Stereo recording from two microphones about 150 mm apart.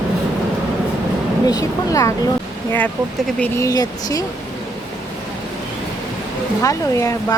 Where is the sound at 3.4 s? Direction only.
20° left (ahead or behind).